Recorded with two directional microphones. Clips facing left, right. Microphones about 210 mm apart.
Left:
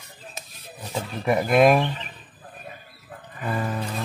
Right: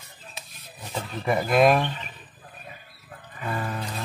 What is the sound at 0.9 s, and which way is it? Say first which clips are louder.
Speech: left 2 dB; 5° left (ahead or behind).